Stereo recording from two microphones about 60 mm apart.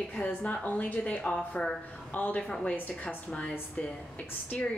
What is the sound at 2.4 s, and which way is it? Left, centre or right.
A woman's voice, centre.